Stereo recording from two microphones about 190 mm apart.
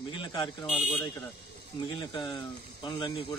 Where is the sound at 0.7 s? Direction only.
15° left (ahead or behind).